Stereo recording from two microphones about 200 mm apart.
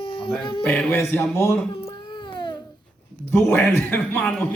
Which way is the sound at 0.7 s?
10° left (ahead or behind).